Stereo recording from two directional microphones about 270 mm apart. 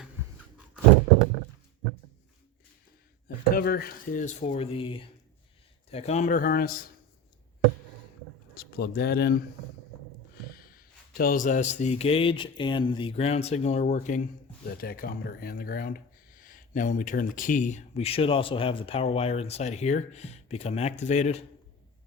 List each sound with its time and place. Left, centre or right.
3.2 s speech: left
8.5 s speech: left
10.5 s a man's voice: left